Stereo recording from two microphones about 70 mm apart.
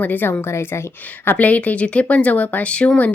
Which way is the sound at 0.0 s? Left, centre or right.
Left.